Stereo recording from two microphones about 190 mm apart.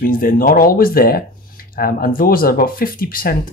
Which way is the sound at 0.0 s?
45° left (ahead or behind).